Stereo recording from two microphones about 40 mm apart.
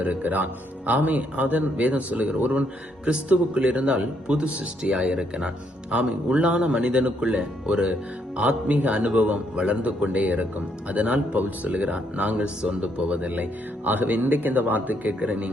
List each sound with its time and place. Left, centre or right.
0.0 s a man's voice: right
15.2 s a man's voice: right